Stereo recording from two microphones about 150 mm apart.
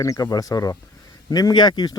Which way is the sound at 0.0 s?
25° left (ahead or behind).